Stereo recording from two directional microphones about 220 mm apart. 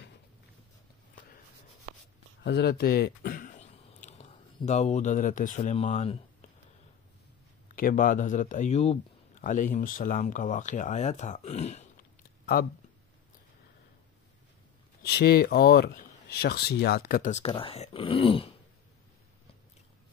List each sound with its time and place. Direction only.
2.4 s speech: 50° left (ahead or behind); by 6.2 s 30° left (ahead or behind)
7.6 s speech: 35° left (ahead or behind)
12.6 s speech: 45° left (ahead or behind)
15.0 s speech: 45° left (ahead or behind); by 18.6 s 25° left (ahead or behind)